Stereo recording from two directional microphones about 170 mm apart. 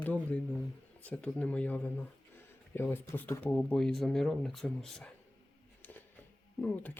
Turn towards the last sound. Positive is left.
turn(degrees=5)  # may be behind; listen again after turning